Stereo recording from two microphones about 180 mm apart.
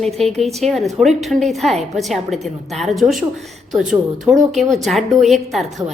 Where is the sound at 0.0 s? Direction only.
Centre (ahead or behind).